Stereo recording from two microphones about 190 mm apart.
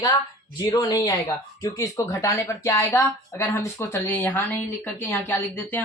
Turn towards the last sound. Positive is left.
turn(degrees=10)  # may be behind; listen again after turning